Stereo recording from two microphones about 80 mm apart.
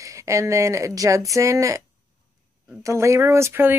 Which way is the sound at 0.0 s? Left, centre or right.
Right.